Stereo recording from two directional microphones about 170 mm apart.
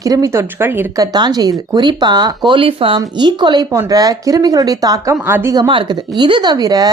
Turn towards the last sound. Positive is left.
turn(degrees=-20)  # may be behind; listen again after turning